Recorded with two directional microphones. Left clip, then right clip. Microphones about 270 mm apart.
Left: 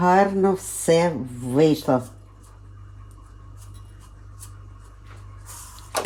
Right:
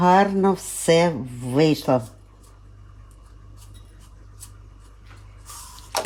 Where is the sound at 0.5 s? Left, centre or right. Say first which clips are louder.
Left 1 dB; centre.